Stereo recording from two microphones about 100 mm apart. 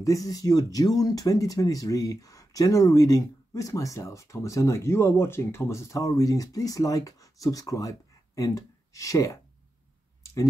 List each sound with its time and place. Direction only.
0.0 s speech: 35° left (ahead or behind)